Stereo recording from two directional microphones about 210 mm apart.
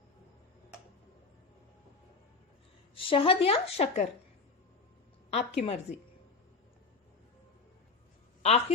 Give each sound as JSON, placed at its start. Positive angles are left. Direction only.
{"t": 2.9, "sound": "a woman's voice", "side_deg": 25}
{"t": 5.5, "sound": "a woman's voice", "side_deg": 30}
{"t": 8.4, "sound": "a sound", "side_deg": 30}